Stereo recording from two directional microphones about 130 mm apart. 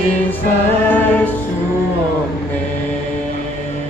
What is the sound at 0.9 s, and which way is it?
Music, 15° left (ahead or behind).